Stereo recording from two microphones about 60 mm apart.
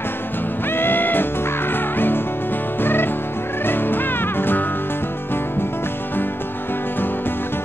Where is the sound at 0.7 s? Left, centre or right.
Left.